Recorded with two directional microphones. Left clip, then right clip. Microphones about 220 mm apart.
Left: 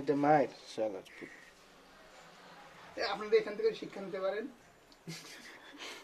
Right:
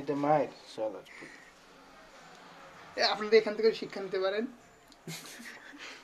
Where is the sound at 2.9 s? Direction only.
35° right (ahead or behind).